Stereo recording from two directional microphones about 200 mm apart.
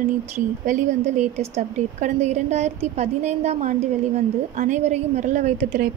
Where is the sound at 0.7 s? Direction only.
40° right (ahead or behind).